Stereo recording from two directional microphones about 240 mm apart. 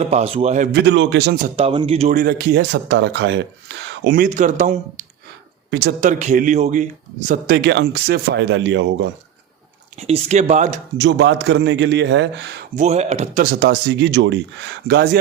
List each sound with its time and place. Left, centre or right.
0.0 s a man's voice: right
0.8 s speech: right
1.5 s speech: right
7.3 s speech: right
10.1 s a man's voice: right
10.9 s speech: right
12.7 s speech: right